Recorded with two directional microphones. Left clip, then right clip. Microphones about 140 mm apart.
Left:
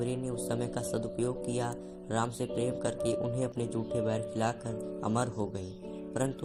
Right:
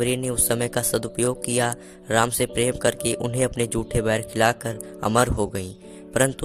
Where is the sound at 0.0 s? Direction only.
90° right.